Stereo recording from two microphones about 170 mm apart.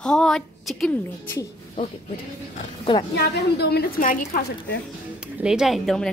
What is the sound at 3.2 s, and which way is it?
A woman's voice, 70° left (ahead or behind).